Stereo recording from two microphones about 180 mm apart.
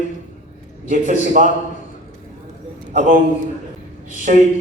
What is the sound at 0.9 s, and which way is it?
Speech, 45° right (ahead or behind).